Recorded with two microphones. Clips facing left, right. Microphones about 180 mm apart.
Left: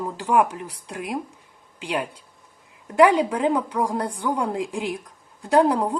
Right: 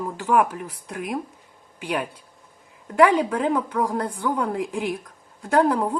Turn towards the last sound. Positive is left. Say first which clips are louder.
# left 1 dB
turn(degrees=15)  # may be behind; listen again after turning